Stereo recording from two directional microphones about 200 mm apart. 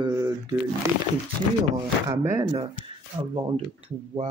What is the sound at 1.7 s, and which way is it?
Speech, 15° right (ahead or behind).